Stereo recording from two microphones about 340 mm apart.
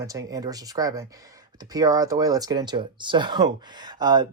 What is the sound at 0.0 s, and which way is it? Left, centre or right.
Speech, centre.